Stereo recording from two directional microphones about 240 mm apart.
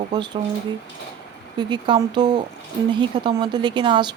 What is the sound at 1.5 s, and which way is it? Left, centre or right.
A woman's voice, centre.